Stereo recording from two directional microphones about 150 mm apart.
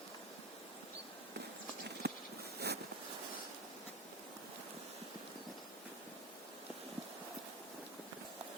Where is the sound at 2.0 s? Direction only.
90° right.